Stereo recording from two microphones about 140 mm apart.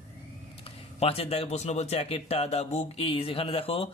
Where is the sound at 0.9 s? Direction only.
45° left (ahead or behind).